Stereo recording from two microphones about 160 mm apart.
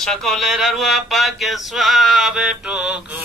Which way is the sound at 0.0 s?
Centre (ahead or behind).